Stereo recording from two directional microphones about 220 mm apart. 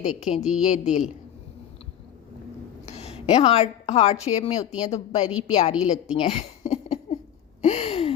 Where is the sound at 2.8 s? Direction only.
30° left (ahead or behind).